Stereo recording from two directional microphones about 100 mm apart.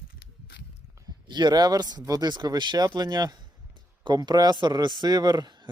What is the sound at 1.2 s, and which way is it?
A man's voice, 45° right (ahead or behind).